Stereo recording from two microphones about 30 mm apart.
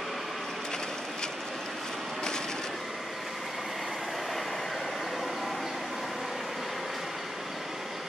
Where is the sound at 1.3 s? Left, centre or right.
Centre.